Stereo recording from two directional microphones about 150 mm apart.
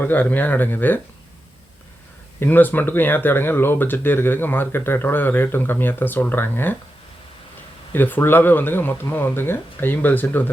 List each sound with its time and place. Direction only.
0.0 s speech: 15° left (ahead or behind)
2.4 s speech: 10° left (ahead or behind)
7.9 s speech: 15° left (ahead or behind)